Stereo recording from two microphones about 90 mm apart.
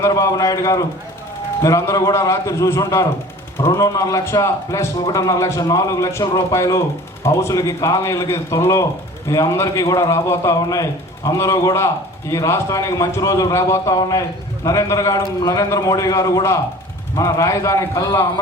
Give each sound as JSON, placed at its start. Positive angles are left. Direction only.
{"t": 0.0, "sound": "a man's voice", "side_deg": 40}